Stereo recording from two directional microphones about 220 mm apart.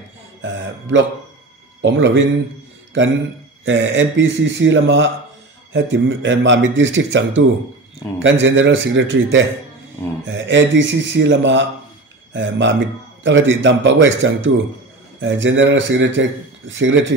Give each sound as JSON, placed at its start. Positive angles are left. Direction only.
{"t": 0.4, "sound": "a man's voice", "side_deg": -55}
{"t": 3.6, "sound": "a man's voice", "side_deg": -55}